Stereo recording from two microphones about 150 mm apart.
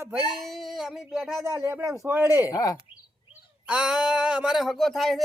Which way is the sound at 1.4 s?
15° right (ahead or behind).